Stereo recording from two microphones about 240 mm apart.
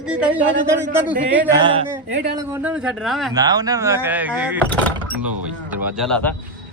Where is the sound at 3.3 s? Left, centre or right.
Centre.